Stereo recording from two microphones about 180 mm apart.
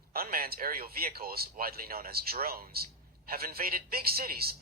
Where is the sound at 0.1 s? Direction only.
55° right (ahead or behind).